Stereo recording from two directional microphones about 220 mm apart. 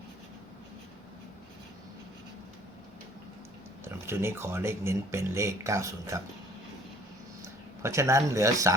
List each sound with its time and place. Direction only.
3.8 s speech: 10° right (ahead or behind)
7.4 s speech: 10° right (ahead or behind)